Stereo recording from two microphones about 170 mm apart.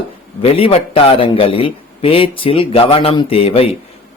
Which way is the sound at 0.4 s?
35° left (ahead or behind).